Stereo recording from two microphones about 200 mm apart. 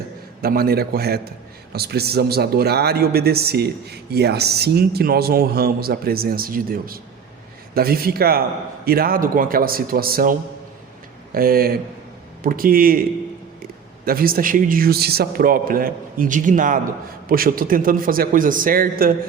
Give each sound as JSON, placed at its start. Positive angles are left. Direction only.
{"t": 0.4, "sound": "a man's voice", "side_deg": -50}